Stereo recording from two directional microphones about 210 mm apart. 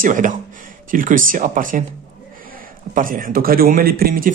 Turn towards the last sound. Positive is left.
turn(degrees=-45)  # may be behind; listen again after turning